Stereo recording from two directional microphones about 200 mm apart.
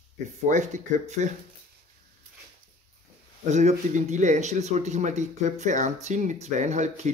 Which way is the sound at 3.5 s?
35° right (ahead or behind).